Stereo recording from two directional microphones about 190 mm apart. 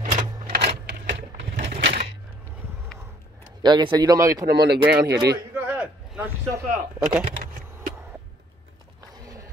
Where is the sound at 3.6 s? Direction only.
25° right (ahead or behind).